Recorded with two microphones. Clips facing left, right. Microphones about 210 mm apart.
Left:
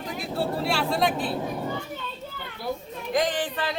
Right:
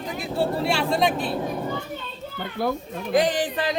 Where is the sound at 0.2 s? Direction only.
Centre (ahead or behind).